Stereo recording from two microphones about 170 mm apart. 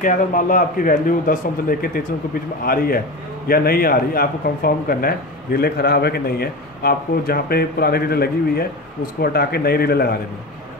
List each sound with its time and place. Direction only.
0.0 s speech: 50° left (ahead or behind)